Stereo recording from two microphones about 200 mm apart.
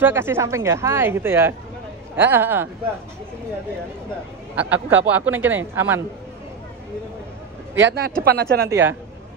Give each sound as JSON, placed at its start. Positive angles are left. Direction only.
{"t": 0.0, "sound": "speech", "side_deg": -10}
{"t": 4.6, "sound": "speech", "side_deg": -10}
{"t": 7.7, "sound": "speech", "side_deg": -60}
{"t": 8.6, "sound": "speech", "side_deg": -10}